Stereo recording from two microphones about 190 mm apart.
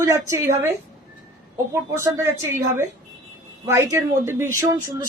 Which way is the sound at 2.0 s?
15° right (ahead or behind).